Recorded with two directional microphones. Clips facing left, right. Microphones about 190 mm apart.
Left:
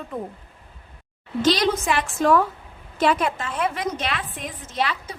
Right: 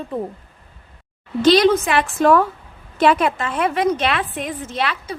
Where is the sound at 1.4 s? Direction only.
65° right (ahead or behind).